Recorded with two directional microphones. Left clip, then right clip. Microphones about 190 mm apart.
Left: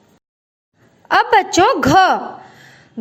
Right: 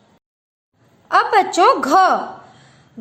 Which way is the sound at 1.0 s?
25° left (ahead or behind).